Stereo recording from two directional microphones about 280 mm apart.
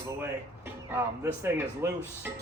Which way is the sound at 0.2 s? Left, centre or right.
Centre.